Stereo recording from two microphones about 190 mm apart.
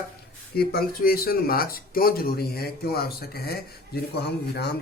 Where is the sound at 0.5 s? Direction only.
55° left (ahead or behind).